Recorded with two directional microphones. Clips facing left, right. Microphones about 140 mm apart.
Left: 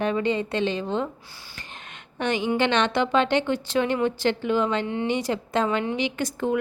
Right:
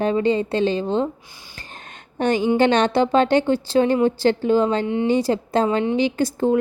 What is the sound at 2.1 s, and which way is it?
A woman's voice, 40° right (ahead or behind).